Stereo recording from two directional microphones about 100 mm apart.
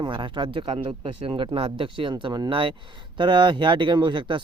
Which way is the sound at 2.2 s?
40° right (ahead or behind).